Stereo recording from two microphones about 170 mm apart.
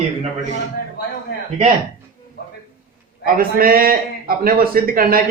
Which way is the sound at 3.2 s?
60° right (ahead or behind).